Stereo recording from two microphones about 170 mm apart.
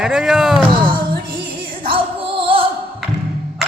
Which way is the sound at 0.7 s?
30° right (ahead or behind).